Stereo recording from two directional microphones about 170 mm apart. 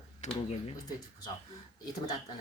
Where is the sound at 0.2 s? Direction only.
45° left (ahead or behind).